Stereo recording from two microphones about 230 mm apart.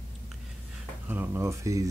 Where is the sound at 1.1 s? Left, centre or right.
Centre.